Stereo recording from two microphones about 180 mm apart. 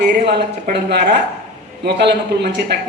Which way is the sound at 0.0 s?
65° right (ahead or behind).